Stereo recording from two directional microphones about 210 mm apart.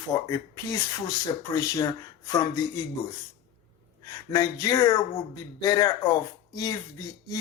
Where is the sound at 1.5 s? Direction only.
15° left (ahead or behind).